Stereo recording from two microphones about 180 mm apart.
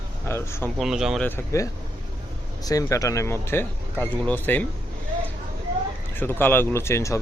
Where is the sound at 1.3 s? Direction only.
15° left (ahead or behind).